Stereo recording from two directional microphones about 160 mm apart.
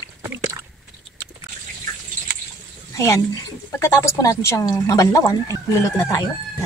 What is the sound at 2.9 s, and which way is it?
Speech, 20° left (ahead or behind).